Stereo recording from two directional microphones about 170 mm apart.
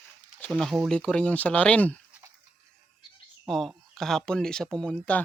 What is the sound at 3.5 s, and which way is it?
Speech, centre (ahead or behind).